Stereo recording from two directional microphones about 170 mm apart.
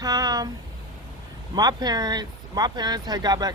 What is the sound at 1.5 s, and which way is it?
Speech, 25° right (ahead or behind).